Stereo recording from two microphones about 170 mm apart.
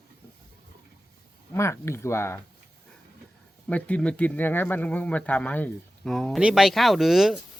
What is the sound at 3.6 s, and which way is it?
Speech, 10° left (ahead or behind).